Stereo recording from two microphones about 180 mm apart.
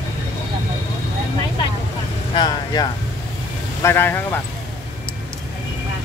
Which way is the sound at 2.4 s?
25° left (ahead or behind).